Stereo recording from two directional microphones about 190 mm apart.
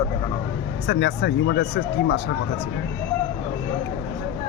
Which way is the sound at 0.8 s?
65° left (ahead or behind).